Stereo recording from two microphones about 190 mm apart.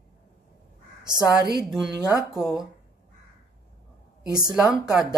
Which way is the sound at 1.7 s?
5° right (ahead or behind).